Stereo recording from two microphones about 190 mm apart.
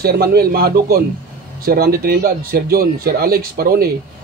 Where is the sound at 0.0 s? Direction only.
55° right (ahead or behind).